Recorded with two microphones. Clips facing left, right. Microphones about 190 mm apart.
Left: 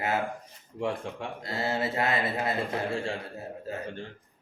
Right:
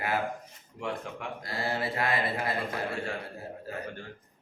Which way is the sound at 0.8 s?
30° left (ahead or behind).